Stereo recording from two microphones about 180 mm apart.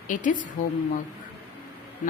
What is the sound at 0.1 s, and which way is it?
Speech, 45° left (ahead or behind).